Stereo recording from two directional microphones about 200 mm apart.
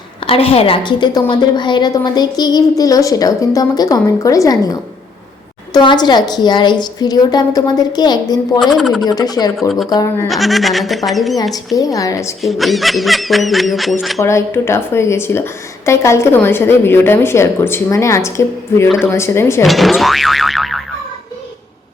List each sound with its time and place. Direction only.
0.3 s a woman's voice: 30° left (ahead or behind)
8.5 s speech: centre (ahead or behind)
9.0 s a woman's voice: 20° left (ahead or behind)
9.6 s speech: centre (ahead or behind)
9.9 s a woman's voice: 20° left (ahead or behind)
10.2 s speech: centre (ahead or behind)
11.8 s a woman's voice: 15° left (ahead or behind)
12.4 s speech: centre (ahead or behind)
14.2 s a woman's voice: 15° left (ahead or behind)
19.6 s speech: centre (ahead or behind)